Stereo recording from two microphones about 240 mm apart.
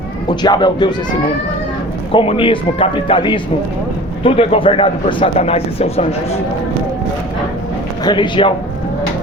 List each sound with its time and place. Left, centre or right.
0.3 s speech: centre
2.1 s a man's voice: left
8.0 s a man's voice: centre